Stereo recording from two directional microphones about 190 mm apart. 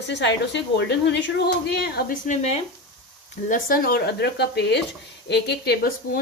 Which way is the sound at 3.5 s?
45° left (ahead or behind).